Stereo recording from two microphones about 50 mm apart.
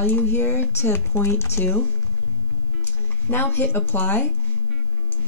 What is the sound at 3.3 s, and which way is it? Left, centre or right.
Speech, left.